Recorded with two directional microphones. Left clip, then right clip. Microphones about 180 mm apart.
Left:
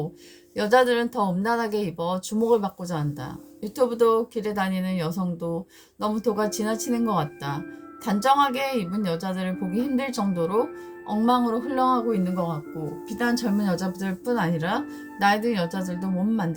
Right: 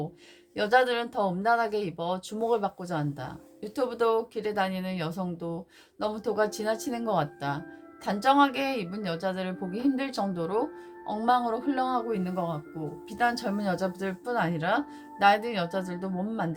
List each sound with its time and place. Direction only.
0.5 s a woman's voice: 10° right (ahead or behind)